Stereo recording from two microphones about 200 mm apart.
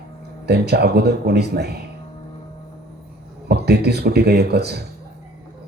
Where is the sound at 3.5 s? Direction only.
55° right (ahead or behind).